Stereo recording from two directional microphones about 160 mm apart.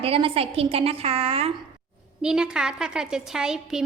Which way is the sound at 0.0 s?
35° right (ahead or behind).